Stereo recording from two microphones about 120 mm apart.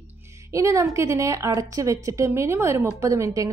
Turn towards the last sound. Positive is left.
turn(degrees=-25)  # may be behind; listen again after turning